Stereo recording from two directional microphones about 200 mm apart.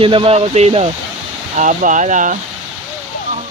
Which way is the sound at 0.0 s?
25° right (ahead or behind).